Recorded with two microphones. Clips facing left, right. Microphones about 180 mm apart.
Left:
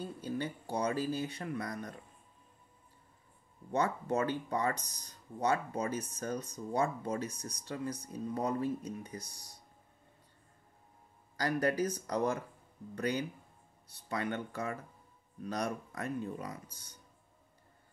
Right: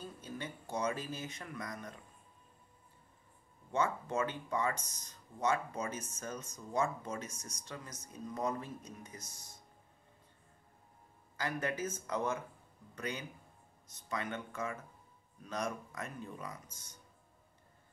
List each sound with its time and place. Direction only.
0.0 s speech: 35° left (ahead or behind)
3.7 s speech: 35° left (ahead or behind)
11.3 s speech: 35° left (ahead or behind)